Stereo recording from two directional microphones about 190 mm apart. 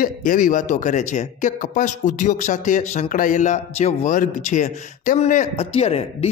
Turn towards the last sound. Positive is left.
turn(degrees=35)  # may be behind; listen again after turning